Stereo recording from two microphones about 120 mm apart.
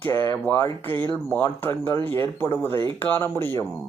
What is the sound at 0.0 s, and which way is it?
Speech, 20° left (ahead or behind).